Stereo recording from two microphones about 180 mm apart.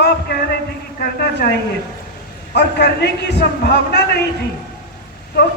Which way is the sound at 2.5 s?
65° left (ahead or behind).